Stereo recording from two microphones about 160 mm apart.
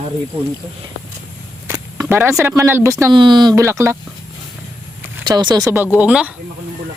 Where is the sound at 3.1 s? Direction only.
30° right (ahead or behind).